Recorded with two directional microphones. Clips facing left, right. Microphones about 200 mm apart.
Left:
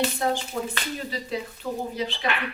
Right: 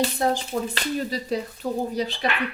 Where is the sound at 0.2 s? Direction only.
35° right (ahead or behind).